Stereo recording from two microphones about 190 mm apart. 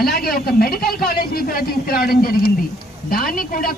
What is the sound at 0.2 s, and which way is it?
A man's voice, 50° left (ahead or behind).